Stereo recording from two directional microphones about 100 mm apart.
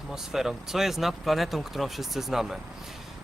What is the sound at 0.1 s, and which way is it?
Speech, 5° right (ahead or behind).